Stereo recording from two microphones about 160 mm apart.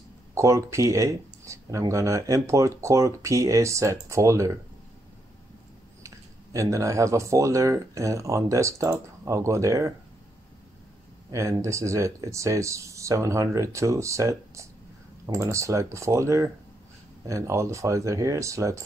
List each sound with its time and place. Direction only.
0.3 s speech: 20° right (ahead or behind)
6.0 s speech: 20° right (ahead or behind)
11.3 s speech: 20° right (ahead or behind)